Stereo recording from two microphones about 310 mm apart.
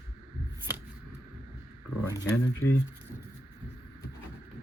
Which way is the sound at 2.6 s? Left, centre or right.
Left.